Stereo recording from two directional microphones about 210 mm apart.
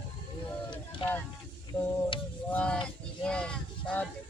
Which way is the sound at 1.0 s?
25° left (ahead or behind).